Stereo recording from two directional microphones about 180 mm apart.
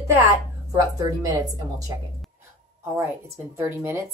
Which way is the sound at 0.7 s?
20° right (ahead or behind).